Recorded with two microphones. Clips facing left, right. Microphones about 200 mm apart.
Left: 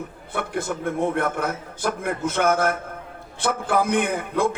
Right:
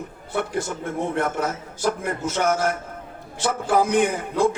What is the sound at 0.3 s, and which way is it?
A man's voice, 55° left (ahead or behind).